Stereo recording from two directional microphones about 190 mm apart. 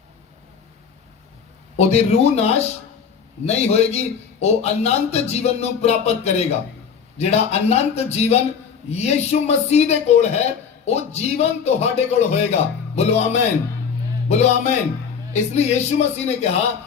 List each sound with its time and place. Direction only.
1.7 s a man's voice: 35° left (ahead or behind)
14.3 s a man's voice: 35° left (ahead or behind)